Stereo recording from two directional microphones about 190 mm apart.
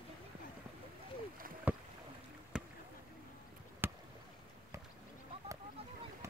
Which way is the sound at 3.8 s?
10° right (ahead or behind).